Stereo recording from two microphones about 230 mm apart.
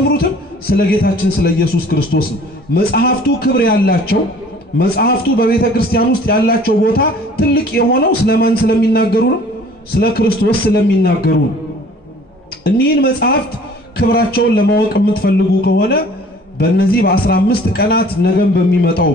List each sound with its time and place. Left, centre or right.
0.2 s a man's voice: left
12.6 s a man's voice: left